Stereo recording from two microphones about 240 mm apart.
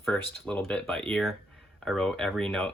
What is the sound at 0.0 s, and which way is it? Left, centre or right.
Speech, centre.